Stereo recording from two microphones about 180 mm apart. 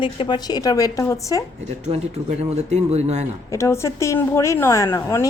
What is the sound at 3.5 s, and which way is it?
A woman's voice, 15° left (ahead or behind).